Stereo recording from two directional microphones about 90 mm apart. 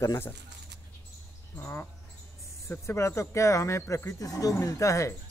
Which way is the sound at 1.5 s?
30° left (ahead or behind).